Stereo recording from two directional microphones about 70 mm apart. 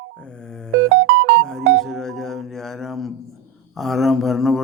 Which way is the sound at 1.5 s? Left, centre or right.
Centre.